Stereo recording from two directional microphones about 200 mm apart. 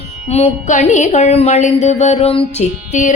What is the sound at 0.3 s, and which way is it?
Speech, 35° left (ahead or behind).